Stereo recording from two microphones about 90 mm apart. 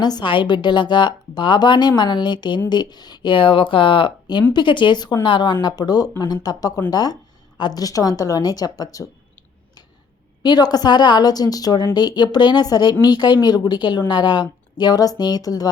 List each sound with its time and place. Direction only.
0.0 s a woman's voice: 55° left (ahead or behind)
10.4 s speech: 50° left (ahead or behind)